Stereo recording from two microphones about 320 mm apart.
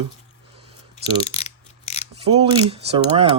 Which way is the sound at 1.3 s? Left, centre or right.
Centre.